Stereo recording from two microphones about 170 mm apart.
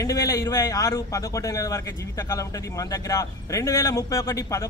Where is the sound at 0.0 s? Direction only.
20° left (ahead or behind).